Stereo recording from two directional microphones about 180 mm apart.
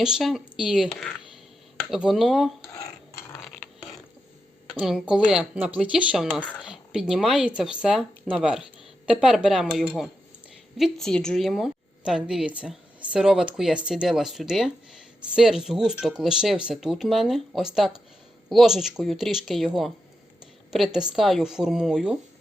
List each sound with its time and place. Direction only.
0.0 s a woman's voice: centre (ahead or behind)
4.8 s a woman's voice: 5° right (ahead or behind)